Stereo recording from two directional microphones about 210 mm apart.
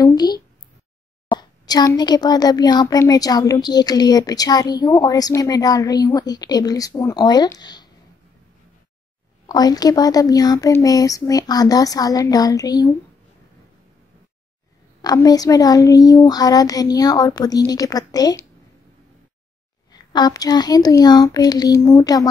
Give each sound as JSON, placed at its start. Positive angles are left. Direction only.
{"t": 0.0, "sound": "a sound", "side_deg": 20}
{"t": 1.3, "sound": "a child's voice", "side_deg": 20}
{"t": 9.5, "sound": "speech", "side_deg": 20}
{"t": 15.0, "sound": "speech", "side_deg": 20}
{"t": 19.9, "sound": "a child's voice", "side_deg": 20}